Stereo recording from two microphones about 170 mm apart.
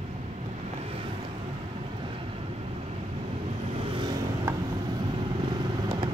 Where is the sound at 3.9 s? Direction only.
25° right (ahead or behind).